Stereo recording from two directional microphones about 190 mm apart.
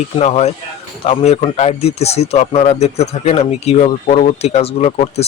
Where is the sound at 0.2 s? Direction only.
35° left (ahead or behind).